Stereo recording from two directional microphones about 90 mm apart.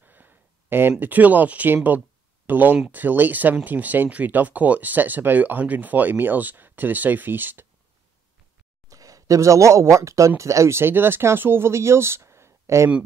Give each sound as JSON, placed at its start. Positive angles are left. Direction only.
{"t": 0.0, "sound": "a sound", "side_deg": -20}
{"t": 2.9, "sound": "speech", "side_deg": -20}
{"t": 8.8, "sound": "speech", "side_deg": -40}